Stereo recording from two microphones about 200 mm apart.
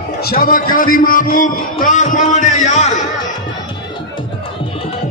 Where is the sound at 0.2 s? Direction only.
45° left (ahead or behind).